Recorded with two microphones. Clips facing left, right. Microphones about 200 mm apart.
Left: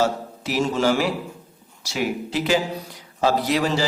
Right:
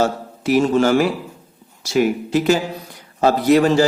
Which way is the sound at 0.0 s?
50° right (ahead or behind).